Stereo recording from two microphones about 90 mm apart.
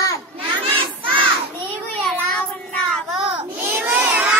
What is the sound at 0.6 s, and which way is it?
Crowd, 70° right (ahead or behind).